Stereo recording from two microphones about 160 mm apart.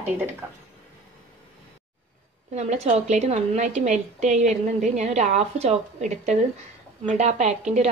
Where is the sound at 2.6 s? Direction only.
45° right (ahead or behind).